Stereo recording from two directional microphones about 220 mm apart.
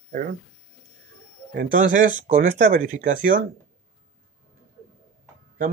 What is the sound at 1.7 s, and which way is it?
Speech, 35° right (ahead or behind).